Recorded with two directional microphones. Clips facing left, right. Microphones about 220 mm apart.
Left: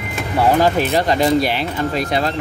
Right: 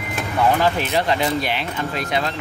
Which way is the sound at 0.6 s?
40° left (ahead or behind).